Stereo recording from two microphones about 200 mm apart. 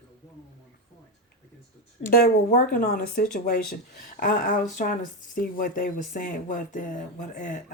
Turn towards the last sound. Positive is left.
turn(degrees=40)  # may be behind; listen again after turning